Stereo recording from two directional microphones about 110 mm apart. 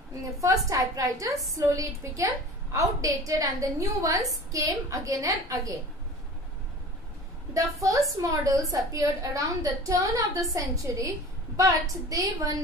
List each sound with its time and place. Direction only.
0.4 s a woman's voice: 30° right (ahead or behind)
7.5 s a woman's voice: 30° right (ahead or behind)